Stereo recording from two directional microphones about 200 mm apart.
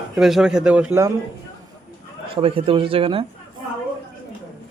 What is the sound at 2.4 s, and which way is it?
Speech, 25° right (ahead or behind).